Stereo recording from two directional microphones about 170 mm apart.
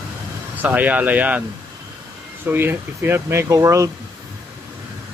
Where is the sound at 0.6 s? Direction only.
10° right (ahead or behind).